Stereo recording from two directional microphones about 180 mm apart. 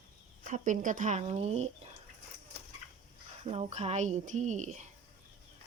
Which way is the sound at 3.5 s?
35° right (ahead or behind).